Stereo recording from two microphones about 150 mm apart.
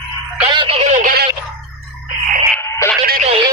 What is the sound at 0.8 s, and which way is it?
Speech, 55° right (ahead or behind).